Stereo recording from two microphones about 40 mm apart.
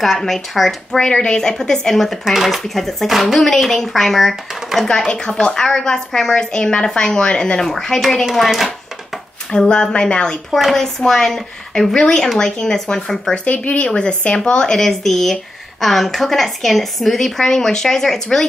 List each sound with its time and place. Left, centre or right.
0.0 s speech: centre
0.9 s speech: centre
2.2 s speech: centre
2.6 s speech: centre
4.8 s speech: left; by 8.6 s centre
9.5 s speech: left
10.5 s speech: centre
13.3 s speech: left
14.8 s speech: centre